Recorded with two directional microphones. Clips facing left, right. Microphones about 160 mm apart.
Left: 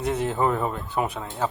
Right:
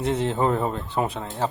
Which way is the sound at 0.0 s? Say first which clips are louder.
Right 1 dB; 25° right (ahead or behind).